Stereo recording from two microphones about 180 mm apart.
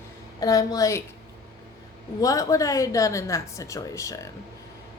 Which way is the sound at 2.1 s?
20° left (ahead or behind).